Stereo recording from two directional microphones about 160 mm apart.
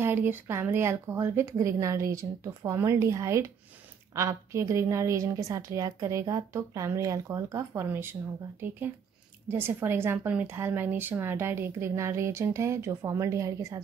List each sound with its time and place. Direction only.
0.0 s a woman's voice: 15° right (ahead or behind)